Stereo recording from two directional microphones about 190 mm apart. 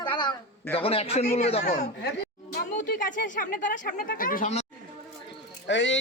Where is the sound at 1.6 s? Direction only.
45° left (ahead or behind).